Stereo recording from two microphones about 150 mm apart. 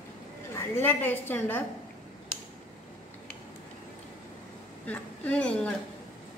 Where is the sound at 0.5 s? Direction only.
15° left (ahead or behind).